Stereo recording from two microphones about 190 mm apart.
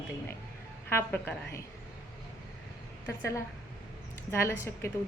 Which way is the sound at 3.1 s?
15° left (ahead or behind).